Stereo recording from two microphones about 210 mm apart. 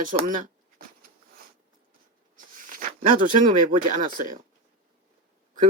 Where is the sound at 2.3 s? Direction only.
40° right (ahead or behind).